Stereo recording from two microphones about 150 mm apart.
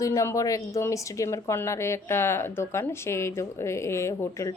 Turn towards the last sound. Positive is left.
turn(degrees=20)  # may be behind; listen again after turning